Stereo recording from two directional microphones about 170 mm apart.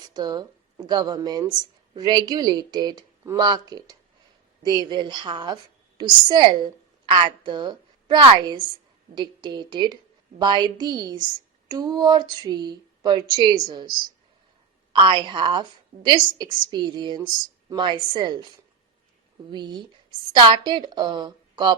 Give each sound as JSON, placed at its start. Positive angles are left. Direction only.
{"t": 0.1, "sound": "a woman's voice", "side_deg": -25}
{"t": 14.9, "sound": "a woman's voice", "side_deg": -30}
{"t": 19.5, "sound": "a woman's voice", "side_deg": -25}